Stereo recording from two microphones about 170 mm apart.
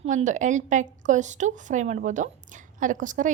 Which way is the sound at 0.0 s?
40° right (ahead or behind).